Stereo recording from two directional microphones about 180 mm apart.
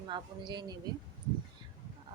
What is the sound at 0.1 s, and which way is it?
Speech, 25° right (ahead or behind).